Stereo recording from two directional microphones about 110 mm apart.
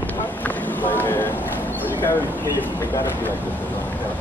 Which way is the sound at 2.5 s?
20° left (ahead or behind).